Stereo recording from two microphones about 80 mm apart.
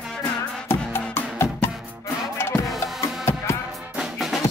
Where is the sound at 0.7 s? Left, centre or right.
Left.